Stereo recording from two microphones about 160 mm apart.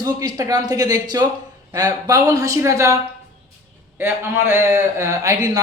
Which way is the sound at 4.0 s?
15° right (ahead or behind).